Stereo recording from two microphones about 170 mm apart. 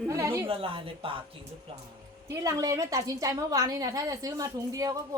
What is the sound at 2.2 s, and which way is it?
A woman's voice, 20° right (ahead or behind).